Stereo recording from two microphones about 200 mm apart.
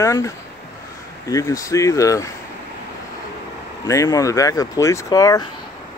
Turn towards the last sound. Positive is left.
turn(degrees=20)  # may be behind; listen again after turning